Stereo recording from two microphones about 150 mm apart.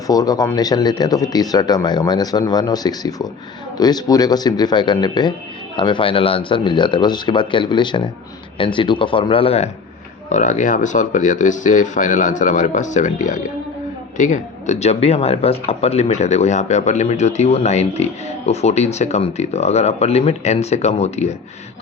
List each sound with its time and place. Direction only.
0.1 s speech: 25° left (ahead or behind); by 9.6 s 40° left (ahead or behind)
10.2 s speech: 55° left (ahead or behind)